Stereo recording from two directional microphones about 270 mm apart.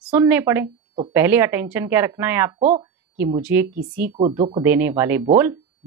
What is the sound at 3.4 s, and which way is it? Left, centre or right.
Speech, centre.